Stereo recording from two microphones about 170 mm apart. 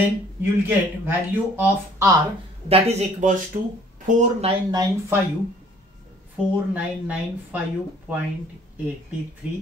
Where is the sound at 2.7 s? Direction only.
40° right (ahead or behind).